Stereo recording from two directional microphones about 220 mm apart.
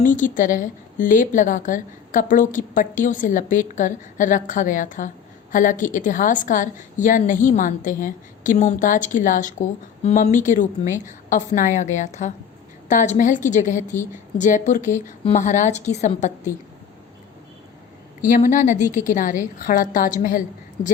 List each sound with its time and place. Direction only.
0.0 s a woman's voice: 35° left (ahead or behind)
18.3 s a woman's voice: 35° left (ahead or behind)